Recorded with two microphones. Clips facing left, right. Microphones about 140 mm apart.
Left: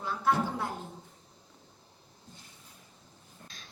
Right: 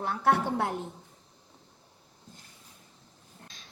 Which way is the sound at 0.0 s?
65° right (ahead or behind).